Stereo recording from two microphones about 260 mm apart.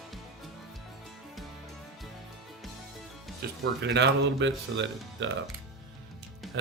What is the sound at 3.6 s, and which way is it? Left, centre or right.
Speech, right.